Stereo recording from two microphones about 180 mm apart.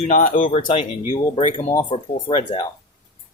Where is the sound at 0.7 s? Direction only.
30° left (ahead or behind).